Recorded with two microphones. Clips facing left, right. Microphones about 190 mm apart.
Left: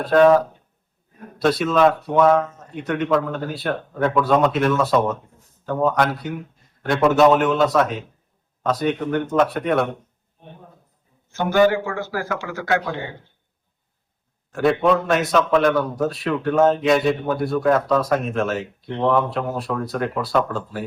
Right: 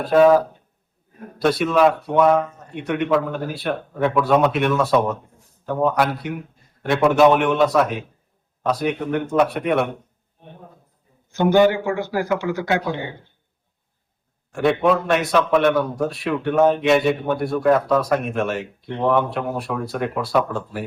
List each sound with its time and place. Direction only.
0.0 s speech: 5° right (ahead or behind)
11.3 s a man's voice: 20° right (ahead or behind)
14.5 s speech: centre (ahead or behind)